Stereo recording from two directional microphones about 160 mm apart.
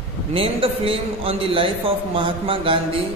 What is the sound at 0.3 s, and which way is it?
A man's voice, 35° right (ahead or behind).